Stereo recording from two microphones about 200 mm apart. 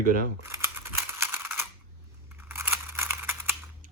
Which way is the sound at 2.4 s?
10° right (ahead or behind).